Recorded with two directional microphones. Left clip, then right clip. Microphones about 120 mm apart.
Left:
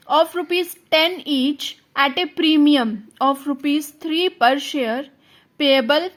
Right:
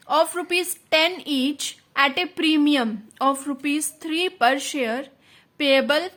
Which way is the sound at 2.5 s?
20° left (ahead or behind).